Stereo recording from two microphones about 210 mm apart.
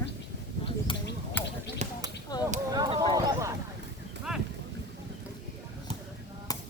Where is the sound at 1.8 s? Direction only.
35° right (ahead or behind).